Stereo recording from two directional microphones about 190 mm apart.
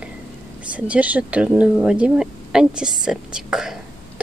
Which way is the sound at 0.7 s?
5° right (ahead or behind).